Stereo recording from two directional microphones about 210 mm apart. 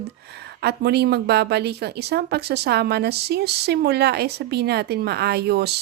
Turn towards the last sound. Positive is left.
turn(degrees=-50)  # may be behind; listen again after turning